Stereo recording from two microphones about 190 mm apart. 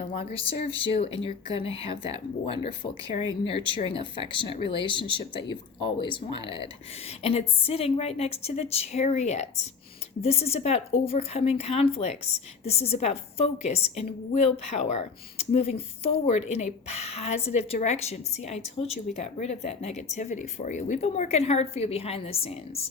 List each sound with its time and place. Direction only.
0.1 s speech: 30° left (ahead or behind)